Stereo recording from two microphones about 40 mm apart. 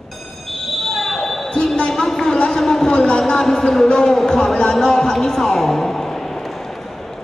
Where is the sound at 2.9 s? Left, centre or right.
Left.